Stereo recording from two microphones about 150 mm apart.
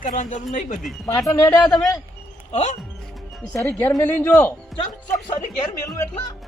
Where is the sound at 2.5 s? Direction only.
50° left (ahead or behind).